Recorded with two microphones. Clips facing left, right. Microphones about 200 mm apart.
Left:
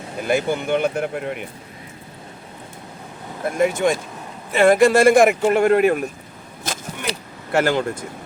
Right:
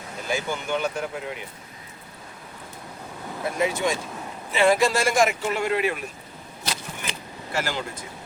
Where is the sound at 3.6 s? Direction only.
50° left (ahead or behind).